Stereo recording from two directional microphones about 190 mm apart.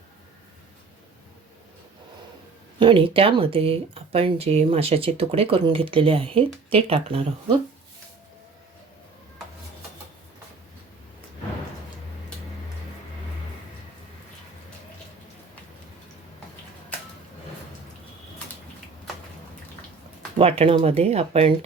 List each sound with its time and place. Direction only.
2.7 s speech: 25° right (ahead or behind)
20.4 s speech: 30° right (ahead or behind)